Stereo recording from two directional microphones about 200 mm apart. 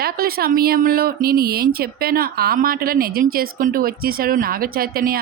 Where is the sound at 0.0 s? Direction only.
50° right (ahead or behind).